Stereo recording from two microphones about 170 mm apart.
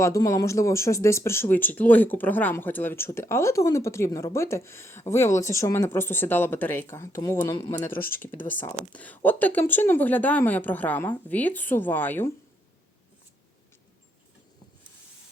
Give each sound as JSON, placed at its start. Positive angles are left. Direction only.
{"t": 0.0, "sound": "speech", "side_deg": 20}